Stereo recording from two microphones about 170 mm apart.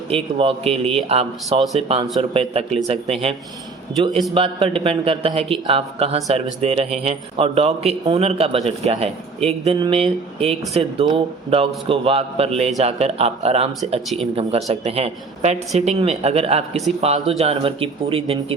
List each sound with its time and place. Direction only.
0.1 s speech: 35° right (ahead or behind)
4.4 s speech: 35° right (ahead or behind)